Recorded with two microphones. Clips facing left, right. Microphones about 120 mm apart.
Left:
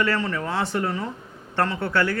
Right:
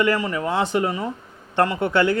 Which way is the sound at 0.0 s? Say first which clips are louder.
Right 3 dB; 15° right (ahead or behind).